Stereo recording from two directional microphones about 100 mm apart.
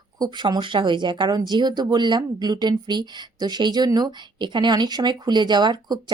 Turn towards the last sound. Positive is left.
turn(degrees=-45)  # may be behind; listen again after turning